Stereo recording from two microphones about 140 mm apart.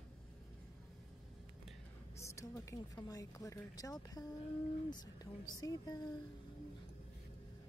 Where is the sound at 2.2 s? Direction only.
20° left (ahead or behind).